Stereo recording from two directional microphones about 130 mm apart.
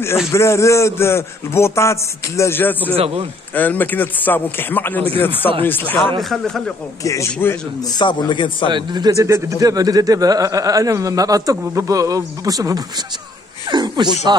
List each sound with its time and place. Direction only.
0.3 s a man's voice: 20° left (ahead or behind)
6.2 s speech: centre (ahead or behind)
7.0 s a man's voice: 25° left (ahead or behind)
8.6 s a man's voice: 35° right (ahead or behind)